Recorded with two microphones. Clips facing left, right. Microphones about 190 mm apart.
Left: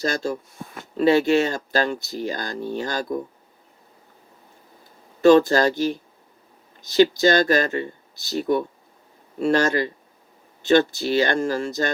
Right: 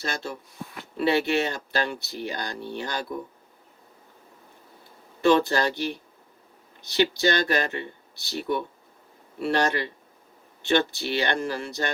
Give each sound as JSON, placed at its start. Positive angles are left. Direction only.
{"t": 0.0, "sound": "speech", "side_deg": 40}
{"t": 5.2, "sound": "speech", "side_deg": 45}